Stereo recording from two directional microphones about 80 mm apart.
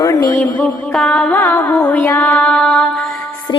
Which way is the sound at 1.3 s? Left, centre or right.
Left.